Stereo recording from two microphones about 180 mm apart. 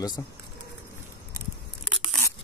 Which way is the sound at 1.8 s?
Centre (ahead or behind).